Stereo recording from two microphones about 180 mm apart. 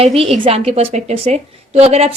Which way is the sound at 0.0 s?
35° right (ahead or behind).